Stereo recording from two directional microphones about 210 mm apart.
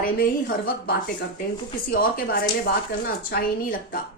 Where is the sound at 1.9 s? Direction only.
45° left (ahead or behind).